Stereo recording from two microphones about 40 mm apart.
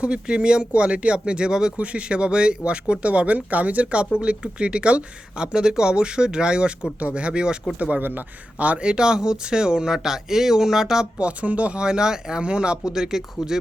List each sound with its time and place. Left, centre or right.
0.0 s speech: right
1.8 s speech: right
4.2 s speech: right
7.8 s speech: right
8.9 s speech: right
11.2 s speech: right; by 13.6 s centre